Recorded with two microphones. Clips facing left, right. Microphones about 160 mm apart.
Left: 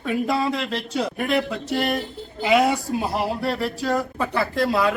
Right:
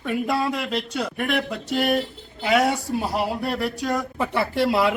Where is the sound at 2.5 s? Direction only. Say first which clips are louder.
Left 1 dB; 10° left (ahead or behind).